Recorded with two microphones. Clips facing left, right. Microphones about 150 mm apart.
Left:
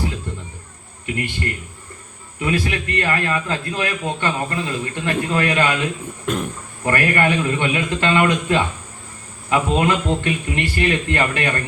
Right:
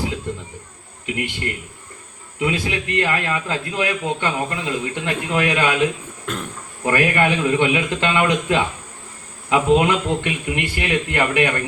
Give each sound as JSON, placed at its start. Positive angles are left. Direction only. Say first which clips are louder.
{"t": 1.0, "sound": "a sound", "louder": "even", "side_deg": -15}
{"t": 2.4, "sound": "a man's voice", "louder": "even", "side_deg": -20}
{"t": 6.2, "sound": "speech", "louder": "left 5 dB", "side_deg": 15}
{"t": 6.8, "sound": "a man's voice", "louder": "even", "side_deg": -15}